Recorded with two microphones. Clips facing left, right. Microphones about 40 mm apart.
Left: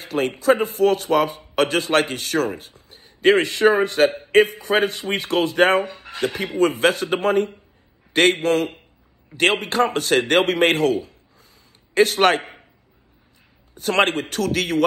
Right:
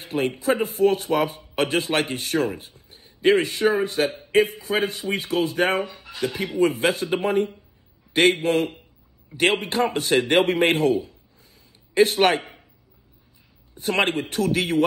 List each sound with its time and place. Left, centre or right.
0.1 s speech: centre
0.5 s a man's voice: left
13.8 s a man's voice: left